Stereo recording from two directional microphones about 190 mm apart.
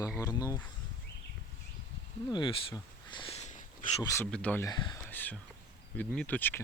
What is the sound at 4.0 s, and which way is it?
Speech, 15° left (ahead or behind).